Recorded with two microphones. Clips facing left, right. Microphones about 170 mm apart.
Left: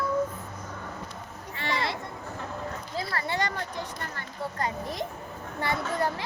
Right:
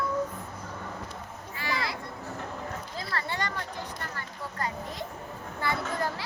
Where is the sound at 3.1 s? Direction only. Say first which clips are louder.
Left 2 dB; 15° left (ahead or behind).